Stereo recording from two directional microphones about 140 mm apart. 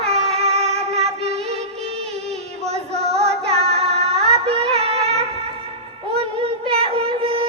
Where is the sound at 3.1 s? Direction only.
45° right (ahead or behind).